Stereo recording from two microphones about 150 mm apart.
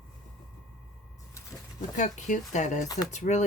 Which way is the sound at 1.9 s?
55° left (ahead or behind).